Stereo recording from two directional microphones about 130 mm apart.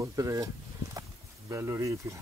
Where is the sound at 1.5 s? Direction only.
20° right (ahead or behind).